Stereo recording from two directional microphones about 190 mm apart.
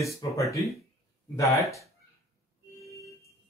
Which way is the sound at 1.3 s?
15° left (ahead or behind).